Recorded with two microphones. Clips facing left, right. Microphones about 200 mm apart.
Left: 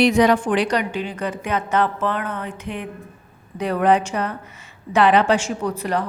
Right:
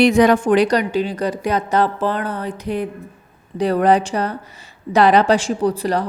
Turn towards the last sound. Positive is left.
turn(degrees=-35)  # may be behind; listen again after turning